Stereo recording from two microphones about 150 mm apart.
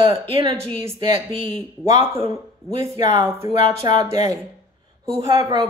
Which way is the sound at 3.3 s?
35° right (ahead or behind).